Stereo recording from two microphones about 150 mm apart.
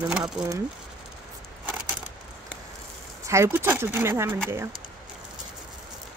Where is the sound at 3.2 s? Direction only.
20° right (ahead or behind).